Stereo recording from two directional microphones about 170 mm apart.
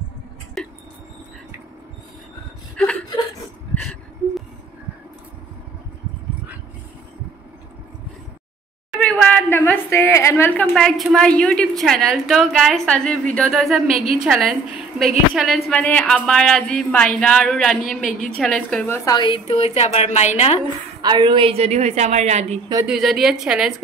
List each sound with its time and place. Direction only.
0.6 s a sound: 5° left (ahead or behind)
2.8 s chuckle: 10° left (ahead or behind)
8.9 s a sound: 5° left (ahead or behind)
10.7 s a woman's voice: centre (ahead or behind)
18.9 s a woman's voice: 25° left (ahead or behind); by 20.6 s 40° left (ahead or behind)
21.0 s a woman's voice: 25° right (ahead or behind)
22.8 s a woman's voice: centre (ahead or behind)